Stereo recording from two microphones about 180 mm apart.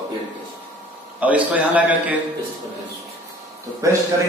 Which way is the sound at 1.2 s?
10° right (ahead or behind).